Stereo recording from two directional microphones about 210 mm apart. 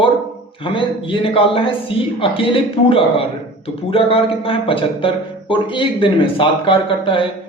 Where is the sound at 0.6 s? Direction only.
25° left (ahead or behind).